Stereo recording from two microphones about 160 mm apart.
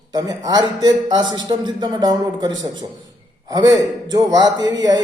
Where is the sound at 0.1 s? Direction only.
25° right (ahead or behind).